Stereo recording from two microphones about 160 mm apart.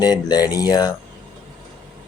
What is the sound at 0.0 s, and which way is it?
Speech, 25° left (ahead or behind).